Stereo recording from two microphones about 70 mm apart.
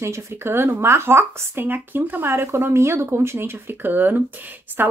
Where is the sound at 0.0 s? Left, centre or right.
Right.